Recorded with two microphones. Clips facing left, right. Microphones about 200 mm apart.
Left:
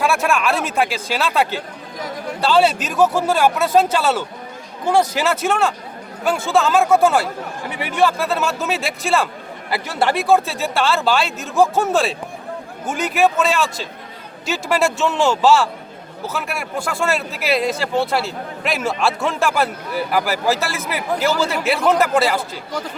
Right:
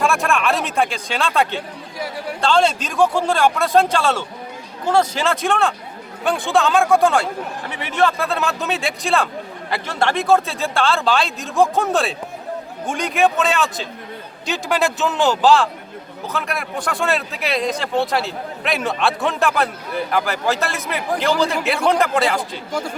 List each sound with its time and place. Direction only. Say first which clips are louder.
0.0 s a man's voice: left 1 dB; centre (ahead or behind)
22.4 s speech: right 1 dB; 10° right (ahead or behind)